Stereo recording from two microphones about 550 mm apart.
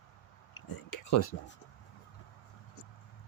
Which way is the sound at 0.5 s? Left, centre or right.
Left.